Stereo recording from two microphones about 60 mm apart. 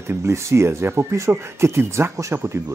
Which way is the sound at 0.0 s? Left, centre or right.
Right.